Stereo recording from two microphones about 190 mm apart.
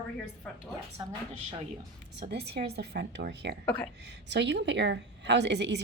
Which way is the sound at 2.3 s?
60° right (ahead or behind).